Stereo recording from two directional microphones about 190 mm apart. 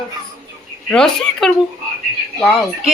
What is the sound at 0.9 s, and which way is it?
Speech, 5° left (ahead or behind).